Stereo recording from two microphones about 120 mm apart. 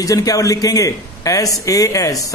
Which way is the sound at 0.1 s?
30° left (ahead or behind).